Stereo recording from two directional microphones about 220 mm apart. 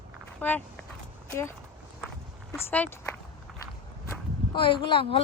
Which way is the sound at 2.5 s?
10° left (ahead or behind).